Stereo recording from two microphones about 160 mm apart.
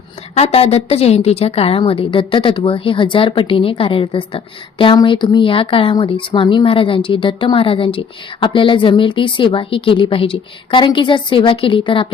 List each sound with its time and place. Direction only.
0.3 s a woman's voice: 40° left (ahead or behind)